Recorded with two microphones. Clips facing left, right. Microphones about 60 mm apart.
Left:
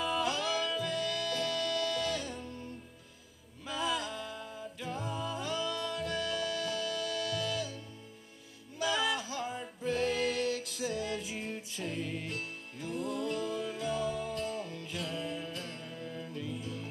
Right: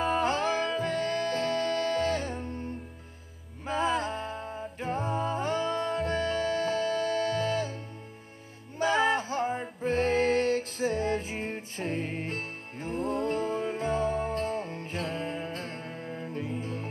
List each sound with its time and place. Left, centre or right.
0.0 s music: right